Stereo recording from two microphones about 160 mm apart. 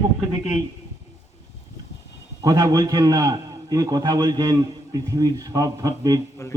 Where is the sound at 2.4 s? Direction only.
25° right (ahead or behind).